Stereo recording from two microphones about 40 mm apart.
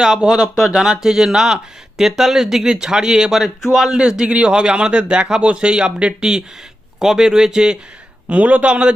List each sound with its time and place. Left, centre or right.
0.0 s speech: centre
3.9 s a man's voice: right
8.3 s speech: right